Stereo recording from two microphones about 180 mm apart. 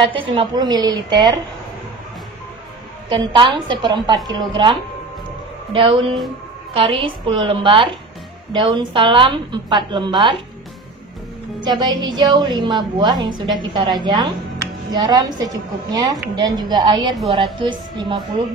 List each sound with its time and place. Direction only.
0.1 s a woman's voice: 30° right (ahead or behind)
3.3 s a woman's voice: 25° right (ahead or behind)
11.6 s a woman's voice: 25° right (ahead or behind)